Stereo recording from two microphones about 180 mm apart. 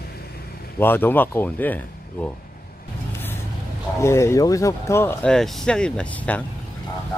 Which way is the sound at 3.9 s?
15° left (ahead or behind).